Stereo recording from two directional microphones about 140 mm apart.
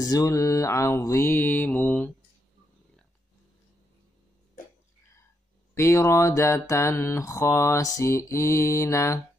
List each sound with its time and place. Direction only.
0.0 s mantra: 25° left (ahead or behind)
5.8 s mantra: 20° left (ahead or behind)